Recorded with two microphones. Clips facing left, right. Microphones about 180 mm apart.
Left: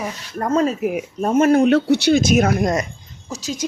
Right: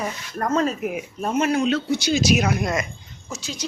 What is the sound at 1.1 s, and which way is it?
Speech, 45° left (ahead or behind).